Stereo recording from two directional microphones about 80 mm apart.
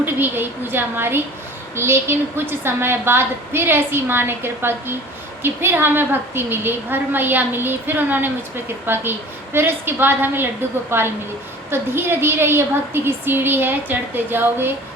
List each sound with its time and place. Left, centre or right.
0.0 s a woman's voice: right